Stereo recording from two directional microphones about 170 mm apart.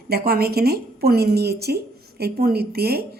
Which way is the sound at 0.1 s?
65° right (ahead or behind).